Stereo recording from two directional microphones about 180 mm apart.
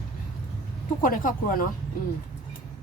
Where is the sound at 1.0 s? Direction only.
50° left (ahead or behind).